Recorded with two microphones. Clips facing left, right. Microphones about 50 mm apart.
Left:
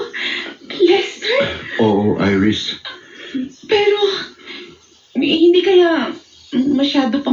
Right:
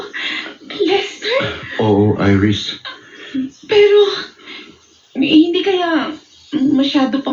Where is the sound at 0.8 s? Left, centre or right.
Centre.